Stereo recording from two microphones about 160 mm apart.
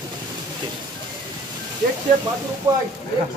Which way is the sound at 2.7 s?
20° right (ahead or behind).